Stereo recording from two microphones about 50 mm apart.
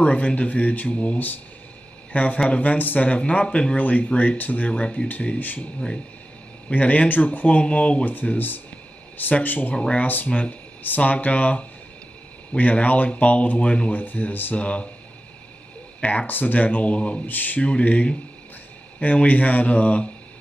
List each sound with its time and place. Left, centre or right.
0.0 s speech: left
4.6 s speech: centre
6.7 s speech: left
8.0 s speech: left
9.8 s speech: left
10.0 s speech: left
13.7 s speech: centre
13.9 s speech: left
14.6 s speech: left
16.0 s speech: left
16.3 s speech: left
17.3 s speech: left
17.6 s speech: left